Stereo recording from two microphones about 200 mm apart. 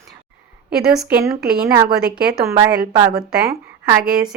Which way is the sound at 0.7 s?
5° right (ahead or behind).